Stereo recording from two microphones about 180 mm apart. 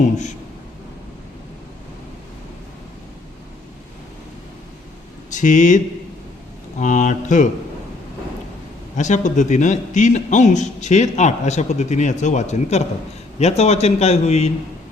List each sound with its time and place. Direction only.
0.0 s a man's voice: 40° left (ahead or behind)
5.3 s speech: 45° left (ahead or behind)
9.0 s a man's voice: 40° left (ahead or behind)